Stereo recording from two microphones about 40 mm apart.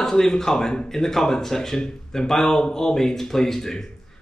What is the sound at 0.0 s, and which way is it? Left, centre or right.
Speech, centre.